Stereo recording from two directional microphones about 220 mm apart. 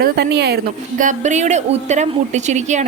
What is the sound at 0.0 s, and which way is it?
A woman's voice, 45° right (ahead or behind).